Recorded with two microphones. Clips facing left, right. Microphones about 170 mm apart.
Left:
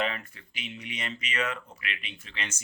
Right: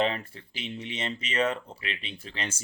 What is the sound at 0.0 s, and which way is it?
Speech, 30° right (ahead or behind).